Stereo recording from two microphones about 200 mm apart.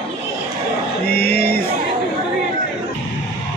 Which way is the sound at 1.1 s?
50° left (ahead or behind).